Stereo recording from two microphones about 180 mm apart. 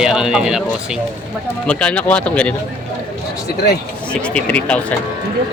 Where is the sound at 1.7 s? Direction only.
5° left (ahead or behind).